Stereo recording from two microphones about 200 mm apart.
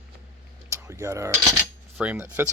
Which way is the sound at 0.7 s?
15° right (ahead or behind).